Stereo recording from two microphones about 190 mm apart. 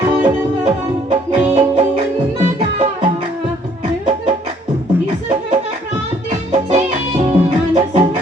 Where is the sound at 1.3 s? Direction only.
30° right (ahead or behind).